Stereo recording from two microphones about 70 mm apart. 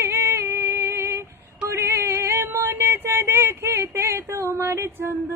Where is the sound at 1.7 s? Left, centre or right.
Right.